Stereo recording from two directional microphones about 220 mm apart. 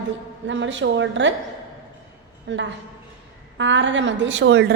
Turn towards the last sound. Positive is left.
turn(degrees=-55)  # may be behind; listen again after turning